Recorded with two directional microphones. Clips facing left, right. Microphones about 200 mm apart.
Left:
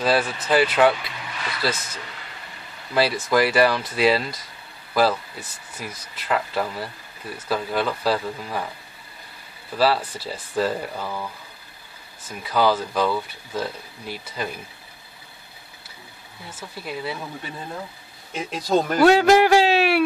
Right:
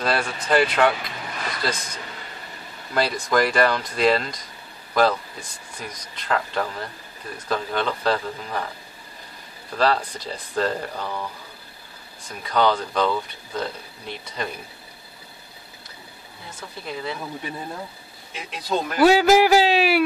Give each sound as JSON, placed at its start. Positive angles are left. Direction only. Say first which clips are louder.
{"t": 0.0, "sound": "speech", "louder": "left 3 dB", "side_deg": 5}
{"t": 1.2, "sound": "a sound", "louder": "right 1 dB", "side_deg": -45}
{"t": 1.6, "sound": "speech", "louder": "left 3 dB", "side_deg": 5}
{"t": 9.8, "sound": "speech", "louder": "left 1 dB", "side_deg": 5}
{"t": 12.3, "sound": "speech", "louder": "even", "side_deg": 5}
{"t": 16.5, "sound": "speech", "louder": "left 1 dB", "side_deg": 5}
{"t": 18.3, "sound": "speech", "louder": "left 5 dB", "side_deg": 45}
{"t": 18.9, "sound": "speech", "louder": "even", "side_deg": 0}